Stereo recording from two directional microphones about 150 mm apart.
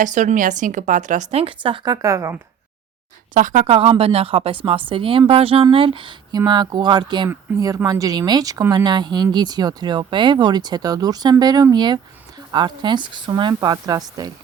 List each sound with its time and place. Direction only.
0.0 s speech: 55° right (ahead or behind)
1.6 s speech: 30° right (ahead or behind)
3.3 s speech: 60° right (ahead or behind)
3.7 s speech: 40° right (ahead or behind)
7.3 s speech: 20° right (ahead or behind)